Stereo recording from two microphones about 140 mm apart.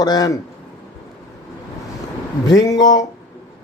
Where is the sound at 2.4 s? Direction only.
25° left (ahead or behind).